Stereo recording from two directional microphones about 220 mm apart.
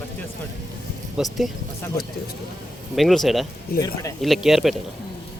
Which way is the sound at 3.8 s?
15° left (ahead or behind).